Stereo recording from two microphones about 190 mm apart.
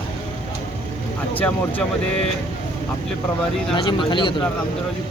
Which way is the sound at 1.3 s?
10° left (ahead or behind).